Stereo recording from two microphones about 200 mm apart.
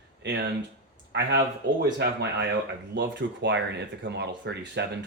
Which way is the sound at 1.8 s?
55° right (ahead or behind).